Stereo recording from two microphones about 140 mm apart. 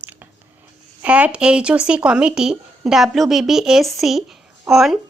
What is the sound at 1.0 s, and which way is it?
Speech, 10° right (ahead or behind).